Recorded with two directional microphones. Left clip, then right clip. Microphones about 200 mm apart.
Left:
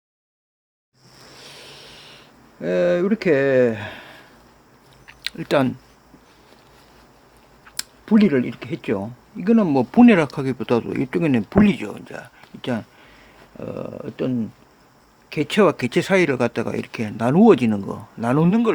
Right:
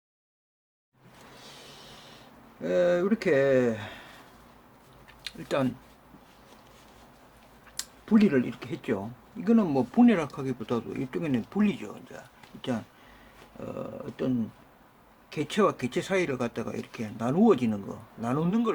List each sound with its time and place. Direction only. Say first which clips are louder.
1.5 s vehicle: left 8 dB; 40° left (ahead or behind)
2.6 s speech: left 5 dB; 40° left (ahead or behind)
5.0 s a sound: left 10 dB; 45° left (ahead or behind)
7.8 s speech: left 6 dB; 40° left (ahead or behind)